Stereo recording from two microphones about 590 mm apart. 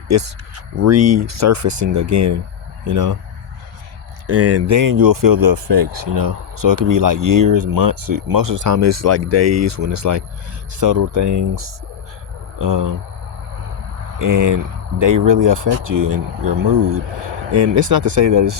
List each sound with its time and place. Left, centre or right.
0.1 s speech: right
4.3 s speech: right
14.2 s speech: right
17.6 s speech: right